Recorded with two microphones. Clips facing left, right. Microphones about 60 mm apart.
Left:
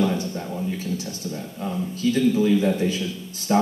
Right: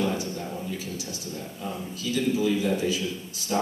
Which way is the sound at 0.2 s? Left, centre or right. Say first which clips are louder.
Left 4 dB; left.